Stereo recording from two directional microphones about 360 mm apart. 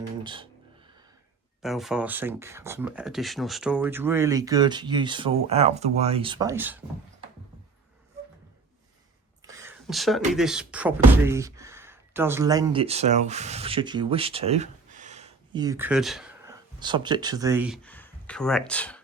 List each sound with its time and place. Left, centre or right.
0.2 s speech: centre
1.6 s speech: centre
9.5 s speech: centre